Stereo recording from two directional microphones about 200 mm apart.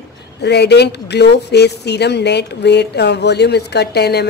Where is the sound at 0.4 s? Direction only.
55° left (ahead or behind).